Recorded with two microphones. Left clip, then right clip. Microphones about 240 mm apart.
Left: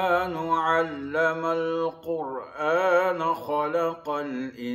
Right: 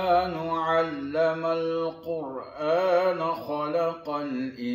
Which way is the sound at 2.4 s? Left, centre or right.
Centre.